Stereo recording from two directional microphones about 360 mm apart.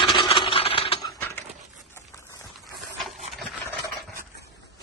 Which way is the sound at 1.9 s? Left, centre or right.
Centre.